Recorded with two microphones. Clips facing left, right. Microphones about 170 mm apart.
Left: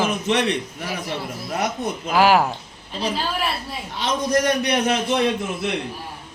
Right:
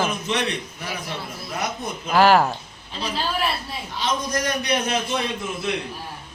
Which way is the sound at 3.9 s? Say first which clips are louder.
Left 4 dB; 65° left (ahead or behind).